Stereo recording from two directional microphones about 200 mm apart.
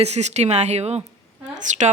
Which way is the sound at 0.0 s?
35° right (ahead or behind).